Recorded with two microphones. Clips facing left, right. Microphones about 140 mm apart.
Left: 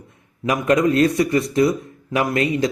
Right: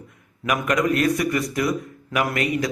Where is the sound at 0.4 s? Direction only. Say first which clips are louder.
Left 4 dB; 30° left (ahead or behind).